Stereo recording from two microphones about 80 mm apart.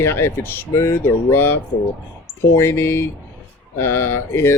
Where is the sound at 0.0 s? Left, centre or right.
Left.